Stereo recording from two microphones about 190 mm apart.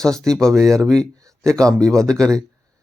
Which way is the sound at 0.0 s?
5° left (ahead or behind).